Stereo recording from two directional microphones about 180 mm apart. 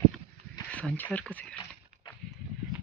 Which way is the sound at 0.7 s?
10° left (ahead or behind).